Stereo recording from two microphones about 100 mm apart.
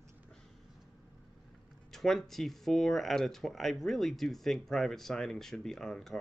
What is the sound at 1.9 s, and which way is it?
Speech, 5° left (ahead or behind).